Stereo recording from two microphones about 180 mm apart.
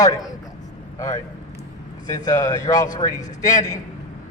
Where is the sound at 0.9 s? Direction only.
20° left (ahead or behind).